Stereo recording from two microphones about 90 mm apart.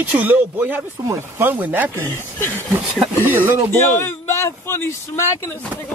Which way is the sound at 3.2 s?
20° right (ahead or behind).